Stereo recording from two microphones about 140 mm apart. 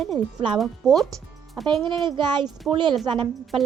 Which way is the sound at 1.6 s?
35° right (ahead or behind).